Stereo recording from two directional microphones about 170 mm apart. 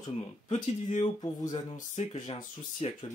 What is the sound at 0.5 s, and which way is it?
Speech, 40° left (ahead or behind).